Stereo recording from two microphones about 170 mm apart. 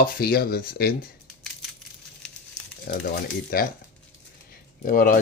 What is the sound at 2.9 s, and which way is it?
Speech, 65° left (ahead or behind).